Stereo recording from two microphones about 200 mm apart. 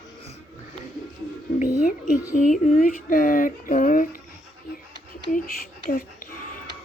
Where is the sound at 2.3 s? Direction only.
40° left (ahead or behind).